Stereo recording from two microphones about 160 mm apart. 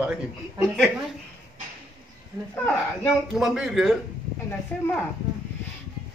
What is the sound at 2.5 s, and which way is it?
Speech, 10° left (ahead or behind).